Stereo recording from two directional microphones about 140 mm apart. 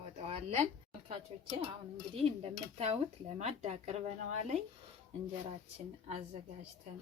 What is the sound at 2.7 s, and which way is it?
A woman's voice, 45° right (ahead or behind).